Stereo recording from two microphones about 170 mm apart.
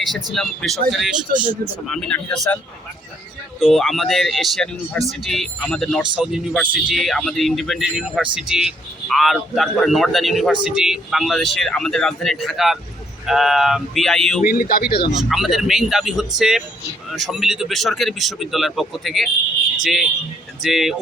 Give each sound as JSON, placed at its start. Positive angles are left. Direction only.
{"t": 0.1, "sound": "a man's voice", "side_deg": 0}
{"t": 3.6, "sound": "a man's voice", "side_deg": 0}
{"t": 14.4, "sound": "speech", "side_deg": 60}
{"t": 15.1, "sound": "a man's voice", "side_deg": 0}